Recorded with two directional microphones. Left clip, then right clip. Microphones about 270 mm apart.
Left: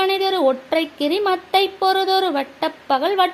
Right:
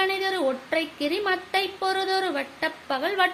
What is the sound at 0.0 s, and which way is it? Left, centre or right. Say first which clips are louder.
A woman's voice: left 7 dB; left.